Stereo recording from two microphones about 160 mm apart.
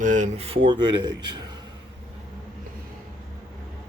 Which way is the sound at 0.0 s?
50° right (ahead or behind).